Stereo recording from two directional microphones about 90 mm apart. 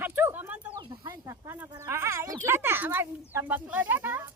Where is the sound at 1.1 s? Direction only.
40° right (ahead or behind).